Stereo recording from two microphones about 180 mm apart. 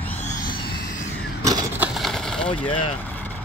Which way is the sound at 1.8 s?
Centre (ahead or behind).